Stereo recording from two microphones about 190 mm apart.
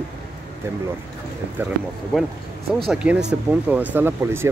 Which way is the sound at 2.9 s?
5° right (ahead or behind).